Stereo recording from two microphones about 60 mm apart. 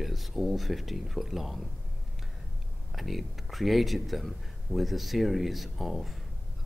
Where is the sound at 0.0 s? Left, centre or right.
Centre.